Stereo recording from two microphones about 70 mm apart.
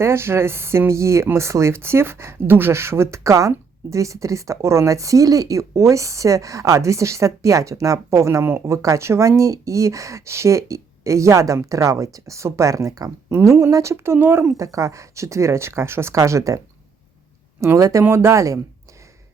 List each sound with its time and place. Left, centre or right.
0.0 s a woman's voice: right
13.9 s speech: right
14.5 s a woman's voice: right
16.1 s a woman's voice: right
17.6 s a woman's voice: right
18.0 s a woman's voice: right